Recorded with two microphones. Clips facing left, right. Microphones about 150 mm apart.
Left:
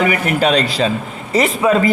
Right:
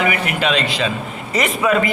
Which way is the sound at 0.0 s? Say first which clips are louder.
Left 4 dB; 40° left (ahead or behind).